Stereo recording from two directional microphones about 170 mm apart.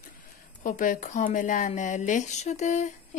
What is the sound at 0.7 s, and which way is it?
Speech, 50° left (ahead or behind).